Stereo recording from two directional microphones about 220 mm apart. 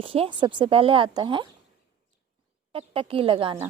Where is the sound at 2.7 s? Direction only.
25° right (ahead or behind).